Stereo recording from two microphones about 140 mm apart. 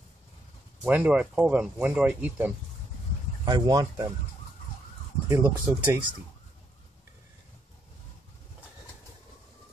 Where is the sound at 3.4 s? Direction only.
30° right (ahead or behind).